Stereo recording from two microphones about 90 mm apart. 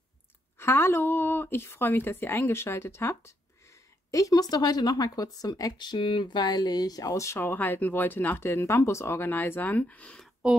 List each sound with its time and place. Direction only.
0.6 s speech: 25° left (ahead or behind)
7.3 s speech: 20° left (ahead or behind)